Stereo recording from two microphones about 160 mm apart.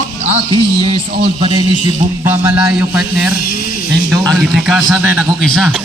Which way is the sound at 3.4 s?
65° left (ahead or behind).